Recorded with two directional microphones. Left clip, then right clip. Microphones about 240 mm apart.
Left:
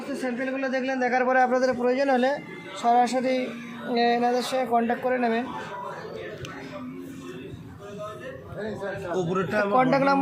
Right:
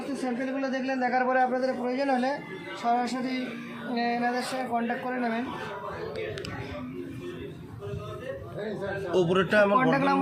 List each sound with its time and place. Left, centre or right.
0.6 s a man's voice: left
9.1 s a man's voice: right
9.9 s speech: left